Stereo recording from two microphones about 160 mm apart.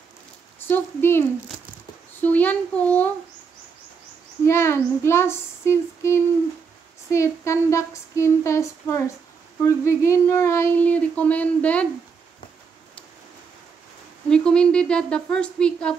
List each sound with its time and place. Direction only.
0.6 s speech: 15° left (ahead or behind)
2.2 s speech: 10° left (ahead or behind)
4.5 s speech: 15° left (ahead or behind)
14.3 s a woman's voice: 5° left (ahead or behind)